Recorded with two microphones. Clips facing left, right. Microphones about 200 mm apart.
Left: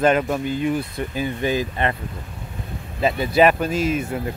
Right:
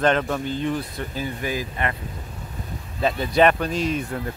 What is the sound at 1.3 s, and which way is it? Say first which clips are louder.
Speech: left 7 dB; 25° left (ahead or behind).